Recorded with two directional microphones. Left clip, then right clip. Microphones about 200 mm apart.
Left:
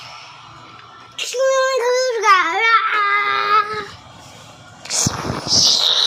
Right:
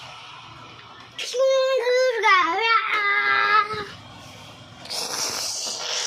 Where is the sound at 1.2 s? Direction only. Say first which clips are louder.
Left 3 dB; 20° left (ahead or behind).